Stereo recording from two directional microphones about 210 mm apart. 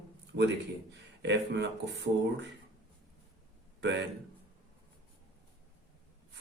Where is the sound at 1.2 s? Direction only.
55° right (ahead or behind).